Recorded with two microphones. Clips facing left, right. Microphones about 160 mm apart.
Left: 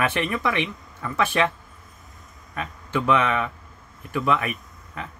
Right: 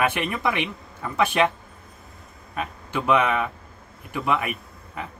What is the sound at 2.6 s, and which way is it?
Speech, 15° right (ahead or behind).